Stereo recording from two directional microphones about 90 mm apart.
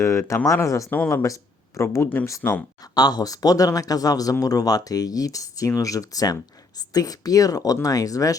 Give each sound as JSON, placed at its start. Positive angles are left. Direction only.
{"t": 0.0, "sound": "speech", "side_deg": 30}
{"t": 2.8, "sound": "speech", "side_deg": 45}